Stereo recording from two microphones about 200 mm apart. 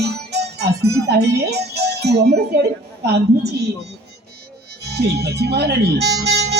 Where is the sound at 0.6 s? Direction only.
55° right (ahead or behind).